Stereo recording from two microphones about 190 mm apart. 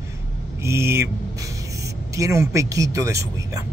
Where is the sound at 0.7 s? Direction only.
15° right (ahead or behind).